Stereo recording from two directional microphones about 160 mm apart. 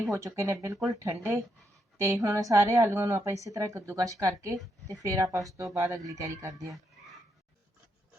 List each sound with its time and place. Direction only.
0.0 s a woman's voice: 20° right (ahead or behind)